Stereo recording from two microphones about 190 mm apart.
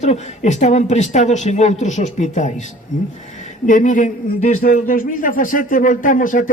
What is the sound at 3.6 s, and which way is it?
A man's voice, 40° left (ahead or behind).